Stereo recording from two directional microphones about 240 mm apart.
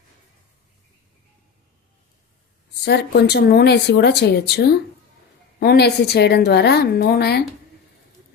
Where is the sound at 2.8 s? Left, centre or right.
Left.